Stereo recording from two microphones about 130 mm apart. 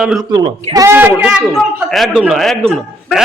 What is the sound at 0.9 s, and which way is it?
Speech, 15° right (ahead or behind).